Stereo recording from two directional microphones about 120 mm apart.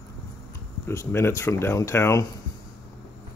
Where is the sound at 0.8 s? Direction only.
20° left (ahead or behind).